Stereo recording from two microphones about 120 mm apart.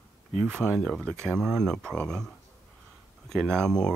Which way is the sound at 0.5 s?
20° right (ahead or behind).